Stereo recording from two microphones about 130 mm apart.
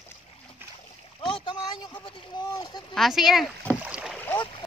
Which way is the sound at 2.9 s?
Centre (ahead or behind).